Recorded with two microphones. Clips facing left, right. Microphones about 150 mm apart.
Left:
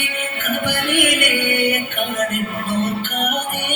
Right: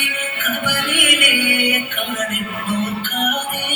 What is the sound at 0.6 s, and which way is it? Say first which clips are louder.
Music: left 4 dB; 55° left (ahead or behind).